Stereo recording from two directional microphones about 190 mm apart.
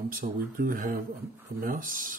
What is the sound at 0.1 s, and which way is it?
Speech, 50° right (ahead or behind).